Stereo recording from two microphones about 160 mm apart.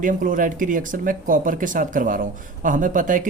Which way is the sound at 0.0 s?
55° right (ahead or behind).